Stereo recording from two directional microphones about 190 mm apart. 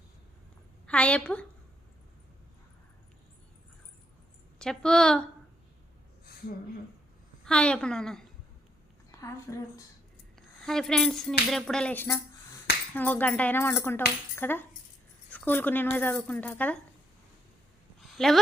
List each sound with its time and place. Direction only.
0.9 s speech: 5° left (ahead or behind)
4.6 s tambourine: 5° left (ahead or behind)
7.4 s tambourine: 5° left (ahead or behind)
9.2 s speech: 15° left (ahead or behind)
10.7 s tambourine: 5° left (ahead or behind)
12.9 s speech: 10° left (ahead or behind)
18.1 s speech: centre (ahead or behind)